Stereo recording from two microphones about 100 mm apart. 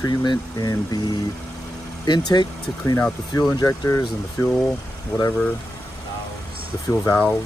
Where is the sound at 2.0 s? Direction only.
45° left (ahead or behind).